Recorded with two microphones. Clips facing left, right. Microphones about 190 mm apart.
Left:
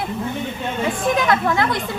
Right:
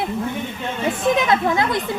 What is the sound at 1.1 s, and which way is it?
Speech, 20° right (ahead or behind).